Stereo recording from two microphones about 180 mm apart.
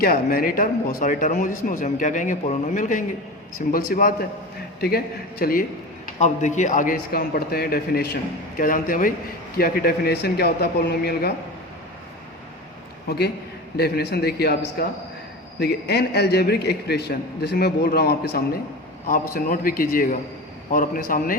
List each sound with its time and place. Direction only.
0.0 s a man's voice: 55° left (ahead or behind)
6.1 s a man's voice: 40° left (ahead or behind); by 11.3 s 60° left (ahead or behind)
13.1 s a man's voice: 65° left (ahead or behind)